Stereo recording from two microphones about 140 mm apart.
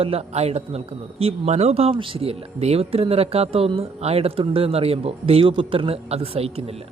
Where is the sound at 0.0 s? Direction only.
45° right (ahead or behind).